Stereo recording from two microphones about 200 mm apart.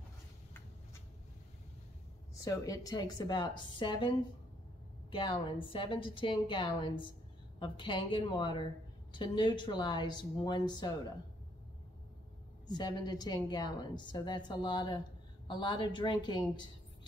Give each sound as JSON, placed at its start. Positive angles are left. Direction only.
{"t": 2.4, "sound": "a woman's voice", "side_deg": 15}
{"t": 5.1, "sound": "a woman's voice", "side_deg": 25}
{"t": 12.6, "sound": "a woman's voice", "side_deg": 20}